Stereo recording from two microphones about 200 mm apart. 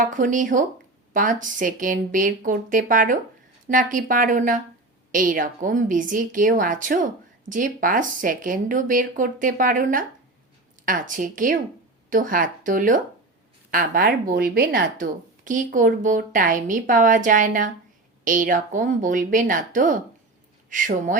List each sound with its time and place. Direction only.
0.0 s a woman's voice: 40° right (ahead or behind)